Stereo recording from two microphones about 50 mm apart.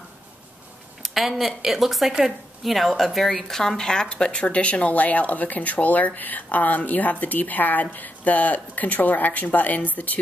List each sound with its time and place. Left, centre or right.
1.0 s speech: centre; by 10.1 s left